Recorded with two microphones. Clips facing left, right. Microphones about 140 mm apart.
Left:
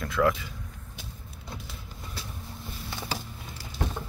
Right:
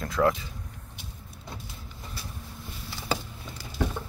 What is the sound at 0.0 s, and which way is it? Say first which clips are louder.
Speech: right 1 dB; 30° right (ahead or behind).